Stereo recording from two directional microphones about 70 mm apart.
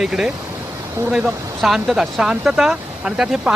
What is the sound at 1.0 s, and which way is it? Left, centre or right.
Speech, right.